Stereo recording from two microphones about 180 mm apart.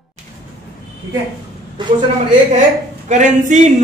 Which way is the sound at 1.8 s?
25° right (ahead or behind).